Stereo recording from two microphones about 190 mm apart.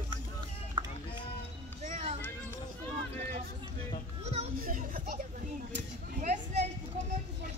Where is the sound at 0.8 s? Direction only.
25° right (ahead or behind).